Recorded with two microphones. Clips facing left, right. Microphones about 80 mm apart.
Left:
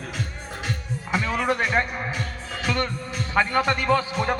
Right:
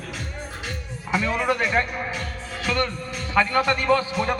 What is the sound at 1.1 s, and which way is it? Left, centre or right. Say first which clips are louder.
A man's voice: right 1 dB; centre.